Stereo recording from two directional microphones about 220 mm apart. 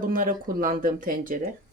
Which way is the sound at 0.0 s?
40° right (ahead or behind).